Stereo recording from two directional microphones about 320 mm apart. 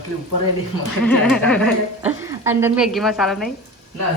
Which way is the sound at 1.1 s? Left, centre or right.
Centre.